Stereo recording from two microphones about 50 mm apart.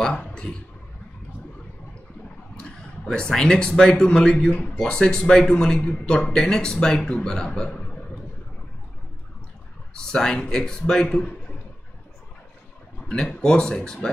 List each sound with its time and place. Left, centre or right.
0.3 s a sound: centre
2.6 s speech: centre
9.9 s speech: centre
13.4 s speech: centre